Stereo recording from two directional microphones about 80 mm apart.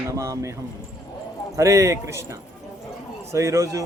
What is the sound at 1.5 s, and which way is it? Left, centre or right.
Speech, right.